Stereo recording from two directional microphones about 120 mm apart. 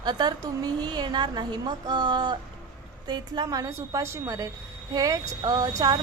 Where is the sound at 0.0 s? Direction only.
35° right (ahead or behind).